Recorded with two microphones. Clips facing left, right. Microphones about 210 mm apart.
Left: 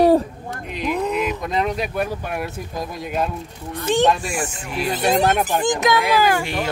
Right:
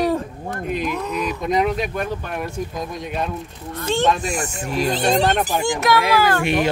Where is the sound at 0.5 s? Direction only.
50° right (ahead or behind).